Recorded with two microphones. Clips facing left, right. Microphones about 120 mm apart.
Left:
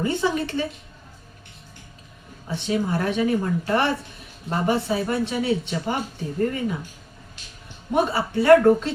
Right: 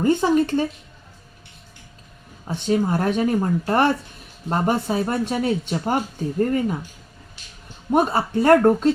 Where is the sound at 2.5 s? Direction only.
45° right (ahead or behind).